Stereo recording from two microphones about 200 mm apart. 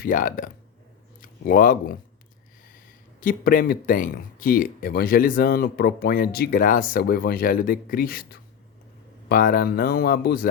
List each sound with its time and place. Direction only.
0.0 s speech: 40° left (ahead or behind)